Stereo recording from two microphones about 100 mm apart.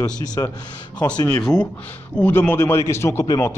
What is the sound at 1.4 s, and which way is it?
A man's voice, 10° left (ahead or behind).